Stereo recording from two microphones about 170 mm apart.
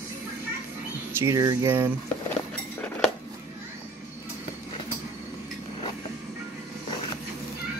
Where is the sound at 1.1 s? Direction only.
15° right (ahead or behind).